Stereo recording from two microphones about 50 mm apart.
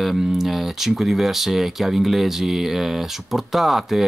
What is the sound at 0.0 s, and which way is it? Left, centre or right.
Speech, centre.